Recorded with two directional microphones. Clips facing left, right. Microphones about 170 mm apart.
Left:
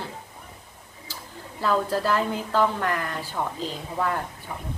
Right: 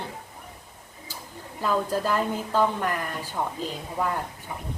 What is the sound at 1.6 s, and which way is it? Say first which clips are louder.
A woman's voice: left 1 dB; 15° right (ahead or behind).